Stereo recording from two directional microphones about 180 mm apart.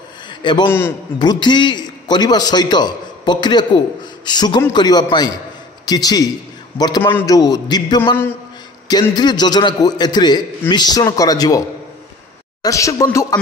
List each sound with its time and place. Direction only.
0.3 s a sound: 25° left (ahead or behind)
0.7 s speech: 15° left (ahead or behind)
1.2 s a man's voice: 25° left (ahead or behind)
12.6 s speech: 15° left (ahead or behind)